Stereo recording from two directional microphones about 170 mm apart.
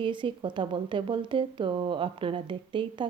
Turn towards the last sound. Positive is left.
turn(degrees=-30)  # may be behind; listen again after turning